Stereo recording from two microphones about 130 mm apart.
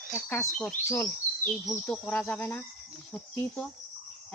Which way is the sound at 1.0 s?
5° left (ahead or behind).